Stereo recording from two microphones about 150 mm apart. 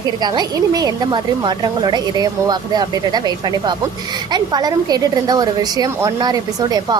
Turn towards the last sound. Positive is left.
turn(degrees=-25)  # may be behind; listen again after turning